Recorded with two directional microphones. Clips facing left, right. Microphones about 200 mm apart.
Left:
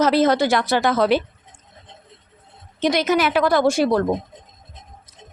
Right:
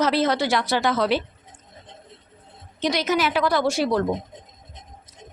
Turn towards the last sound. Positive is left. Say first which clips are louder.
# left 4 dB
turn(degrees=50)  # may be behind; listen again after turning